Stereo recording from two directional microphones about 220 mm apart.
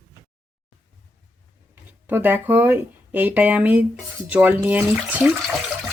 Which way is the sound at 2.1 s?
10° right (ahead or behind).